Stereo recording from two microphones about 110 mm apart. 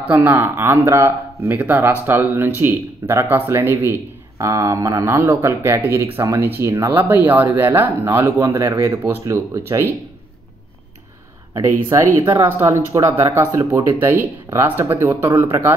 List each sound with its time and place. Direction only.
0.1 s speech: 20° right (ahead or behind)
6.9 s speech: 15° right (ahead or behind)
8.5 s speech: 30° right (ahead or behind)
12.2 s speech: 25° right (ahead or behind)